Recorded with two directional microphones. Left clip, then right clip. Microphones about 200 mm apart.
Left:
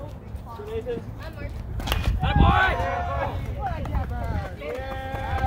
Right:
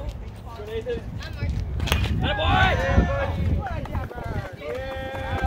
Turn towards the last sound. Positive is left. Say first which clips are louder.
# even
turn(degrees=55)  # may be behind; listen again after turning